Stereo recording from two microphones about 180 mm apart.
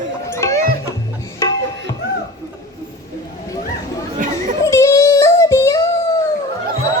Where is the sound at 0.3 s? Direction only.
15° left (ahead or behind).